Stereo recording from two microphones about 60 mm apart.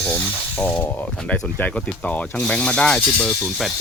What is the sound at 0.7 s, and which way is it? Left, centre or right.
Speech, left.